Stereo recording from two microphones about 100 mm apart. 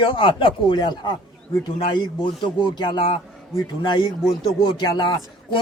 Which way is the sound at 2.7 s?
50° left (ahead or behind).